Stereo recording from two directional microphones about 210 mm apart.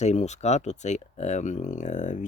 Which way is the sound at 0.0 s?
30° left (ahead or behind).